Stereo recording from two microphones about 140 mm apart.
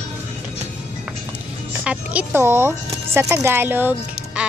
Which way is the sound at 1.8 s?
10° right (ahead or behind).